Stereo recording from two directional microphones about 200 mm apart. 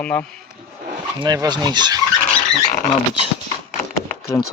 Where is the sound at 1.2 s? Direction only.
20° right (ahead or behind).